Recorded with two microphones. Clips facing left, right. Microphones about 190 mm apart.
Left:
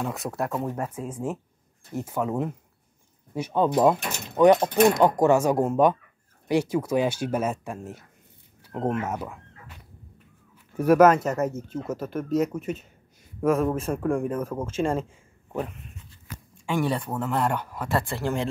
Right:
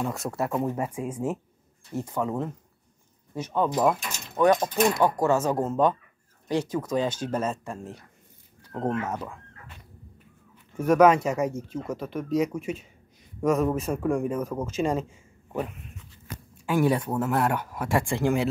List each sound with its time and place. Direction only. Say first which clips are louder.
0.0 s speech: even; centre (ahead or behind)
2.0 s speech: left 1 dB; 5° left (ahead or behind)
8.6 s a sound: left 1 dB; 10° left (ahead or behind)
9.0 s chicken: left 1 dB; 10° left (ahead or behind)
10.7 s speech: left 2 dB; 5° left (ahead or behind); by 18.5 s 10° right (ahead or behind)